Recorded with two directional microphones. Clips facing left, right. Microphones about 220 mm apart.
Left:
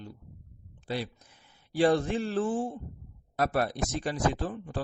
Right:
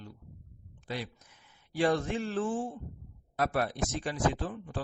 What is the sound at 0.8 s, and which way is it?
Speech, 30° left (ahead or behind).